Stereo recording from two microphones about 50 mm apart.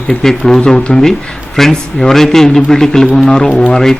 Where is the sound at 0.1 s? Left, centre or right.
Centre.